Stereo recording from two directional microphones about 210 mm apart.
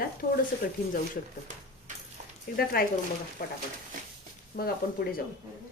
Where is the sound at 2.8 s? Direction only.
45° left (ahead or behind).